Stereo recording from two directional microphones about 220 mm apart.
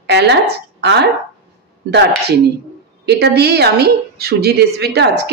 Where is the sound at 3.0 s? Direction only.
50° right (ahead or behind).